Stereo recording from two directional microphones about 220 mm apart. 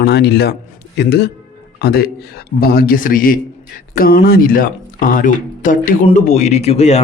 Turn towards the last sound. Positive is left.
turn(degrees=30)  # may be behind; listen again after turning